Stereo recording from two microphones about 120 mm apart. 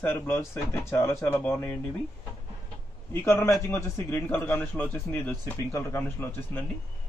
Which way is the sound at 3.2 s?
20° left (ahead or behind).